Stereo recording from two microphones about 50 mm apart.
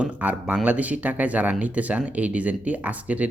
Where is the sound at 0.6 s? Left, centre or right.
Right.